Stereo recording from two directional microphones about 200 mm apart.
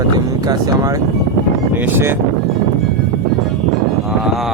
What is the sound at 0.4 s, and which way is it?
Speech, 20° right (ahead or behind).